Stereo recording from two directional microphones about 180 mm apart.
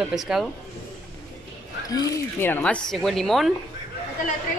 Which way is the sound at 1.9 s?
20° left (ahead or behind).